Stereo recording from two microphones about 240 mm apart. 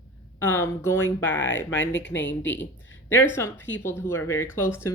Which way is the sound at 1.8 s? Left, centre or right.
Left.